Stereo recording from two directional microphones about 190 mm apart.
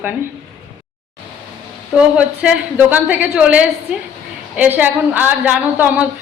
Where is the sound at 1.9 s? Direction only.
5° right (ahead or behind).